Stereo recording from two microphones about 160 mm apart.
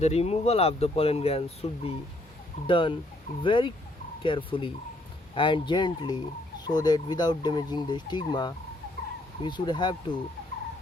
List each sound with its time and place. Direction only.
0.0 s speech: 40° left (ahead or behind)